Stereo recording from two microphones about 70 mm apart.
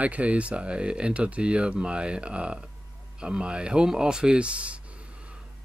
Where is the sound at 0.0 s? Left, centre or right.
Centre.